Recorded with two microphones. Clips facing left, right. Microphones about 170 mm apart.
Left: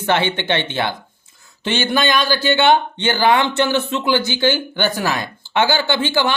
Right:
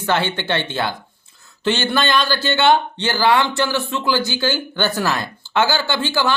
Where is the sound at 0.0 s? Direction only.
20° left (ahead or behind).